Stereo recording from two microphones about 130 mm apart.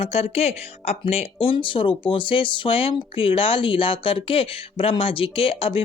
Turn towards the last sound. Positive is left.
turn(degrees=45)  # may be behind; listen again after turning